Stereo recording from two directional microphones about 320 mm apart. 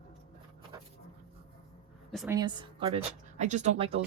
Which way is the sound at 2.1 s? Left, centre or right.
Centre.